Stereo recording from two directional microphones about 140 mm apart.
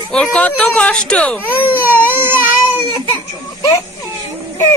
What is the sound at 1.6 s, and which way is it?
Baby cry, 15° right (ahead or behind).